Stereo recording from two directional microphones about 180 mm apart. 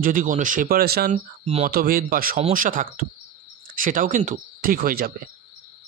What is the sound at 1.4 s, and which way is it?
Speech, 35° right (ahead or behind).